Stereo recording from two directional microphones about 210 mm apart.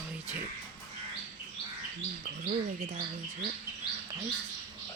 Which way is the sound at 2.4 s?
30° right (ahead or behind).